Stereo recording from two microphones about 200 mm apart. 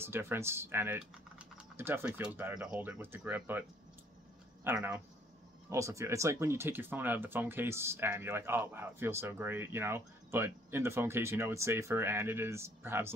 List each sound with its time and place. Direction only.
0.0 s speech: 10° right (ahead or behind)
4.6 s speech: 10° right (ahead or behind)